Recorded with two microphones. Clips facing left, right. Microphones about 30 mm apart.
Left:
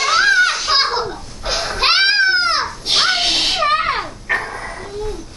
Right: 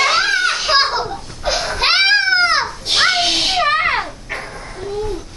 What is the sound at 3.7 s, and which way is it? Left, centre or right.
Dog, centre.